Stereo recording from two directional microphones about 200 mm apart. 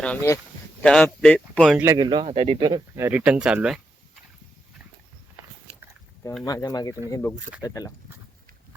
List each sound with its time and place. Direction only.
0.0 s speech: 10° left (ahead or behind)
1.8 s speech: 15° right (ahead or behind)
6.4 s speech: 20° left (ahead or behind)